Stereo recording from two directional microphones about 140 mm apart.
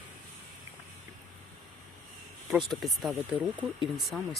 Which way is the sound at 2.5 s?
Centre (ahead or behind).